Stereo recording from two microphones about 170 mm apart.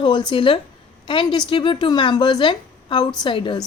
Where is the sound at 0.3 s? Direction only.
30° left (ahead or behind).